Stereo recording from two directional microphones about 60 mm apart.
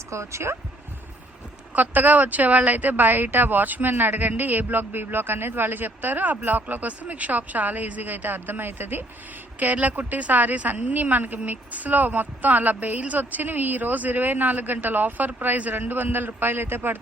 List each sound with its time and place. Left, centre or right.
0.1 s speech: right
1.7 s a woman's voice: right